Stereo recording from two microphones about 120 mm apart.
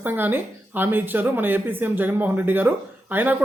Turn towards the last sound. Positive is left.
turn(degrees=-15)  # may be behind; listen again after turning